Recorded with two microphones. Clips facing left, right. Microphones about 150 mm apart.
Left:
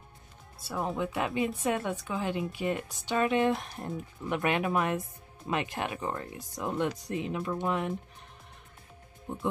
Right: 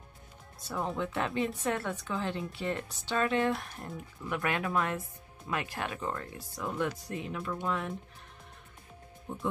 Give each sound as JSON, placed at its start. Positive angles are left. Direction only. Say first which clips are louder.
{"t": 0.6, "sound": "speech", "louder": "left 2 dB", "side_deg": 10}
{"t": 9.3, "sound": "speech", "louder": "left 2 dB", "side_deg": 20}